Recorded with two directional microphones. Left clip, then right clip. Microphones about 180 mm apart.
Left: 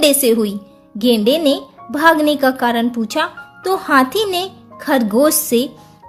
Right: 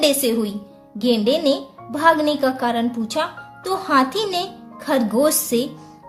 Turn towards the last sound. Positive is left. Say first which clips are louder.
# left 4 dB
turn(degrees=35)  # may be behind; listen again after turning